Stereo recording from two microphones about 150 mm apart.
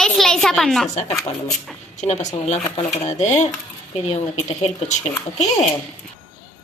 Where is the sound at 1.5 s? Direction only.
50° left (ahead or behind).